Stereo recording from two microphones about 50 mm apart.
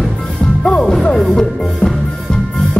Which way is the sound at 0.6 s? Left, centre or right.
Centre.